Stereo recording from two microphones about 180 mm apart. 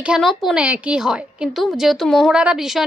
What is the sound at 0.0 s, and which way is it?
A woman's voice, centre (ahead or behind).